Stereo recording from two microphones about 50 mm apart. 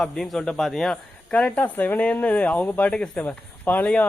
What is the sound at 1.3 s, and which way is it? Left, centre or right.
Speech, left.